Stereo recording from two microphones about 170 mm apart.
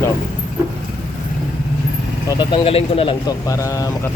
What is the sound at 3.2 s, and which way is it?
Speech, 20° left (ahead or behind).